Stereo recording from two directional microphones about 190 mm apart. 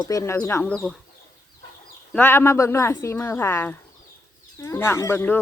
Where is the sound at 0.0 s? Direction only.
15° left (ahead or behind).